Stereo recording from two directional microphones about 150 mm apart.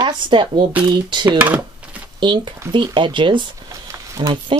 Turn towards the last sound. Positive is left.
turn(degrees=-35)  # may be behind; listen again after turning